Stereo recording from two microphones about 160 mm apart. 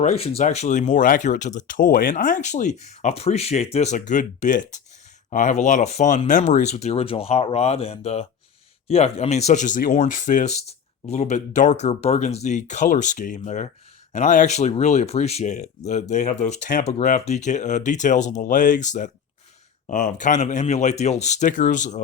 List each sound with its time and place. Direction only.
0.0 s speech: 40° left (ahead or behind)